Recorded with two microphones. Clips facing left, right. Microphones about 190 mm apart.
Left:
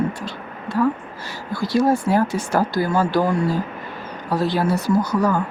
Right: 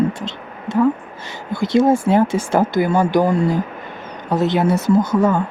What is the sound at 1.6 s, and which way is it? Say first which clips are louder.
Speech: right 4 dB; 25° right (ahead or behind).